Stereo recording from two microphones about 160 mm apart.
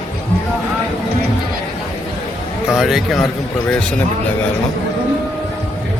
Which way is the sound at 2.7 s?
Centre (ahead or behind).